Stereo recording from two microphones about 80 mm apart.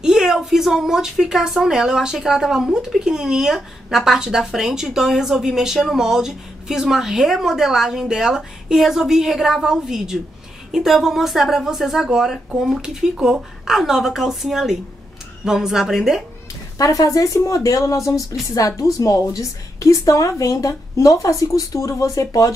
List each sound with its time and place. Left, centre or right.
0.0 s speech: centre
16.7 s a woman's voice: left